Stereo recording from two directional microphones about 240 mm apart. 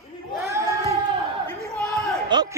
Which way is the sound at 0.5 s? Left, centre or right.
Centre.